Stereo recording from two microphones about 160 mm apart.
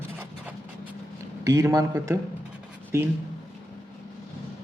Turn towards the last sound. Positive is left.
turn(degrees=-15)  # may be behind; listen again after turning